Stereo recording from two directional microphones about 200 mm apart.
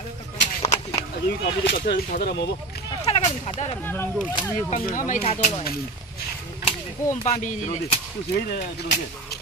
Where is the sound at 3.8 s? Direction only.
10° left (ahead or behind).